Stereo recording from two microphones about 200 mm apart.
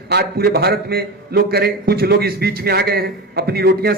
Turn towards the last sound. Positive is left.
turn(degrees=-50)  # may be behind; listen again after turning